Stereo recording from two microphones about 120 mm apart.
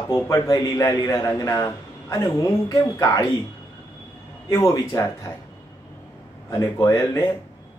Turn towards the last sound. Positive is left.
turn(degrees=25)  # may be behind; listen again after turning